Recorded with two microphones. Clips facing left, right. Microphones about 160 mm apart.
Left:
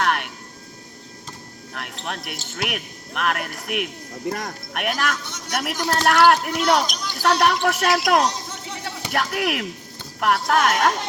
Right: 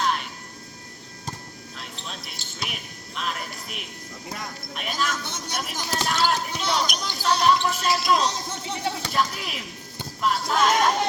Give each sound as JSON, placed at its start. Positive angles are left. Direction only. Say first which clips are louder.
{"t": 0.0, "sound": "vehicle", "louder": "left 3 dB", "side_deg": 65}
{"t": 1.7, "sound": "speech", "louder": "left 8 dB", "side_deg": 65}
{"t": 4.3, "sound": "speech", "louder": "left 8 dB", "side_deg": 45}
{"t": 4.7, "sound": "speech", "louder": "left 4 dB", "side_deg": 70}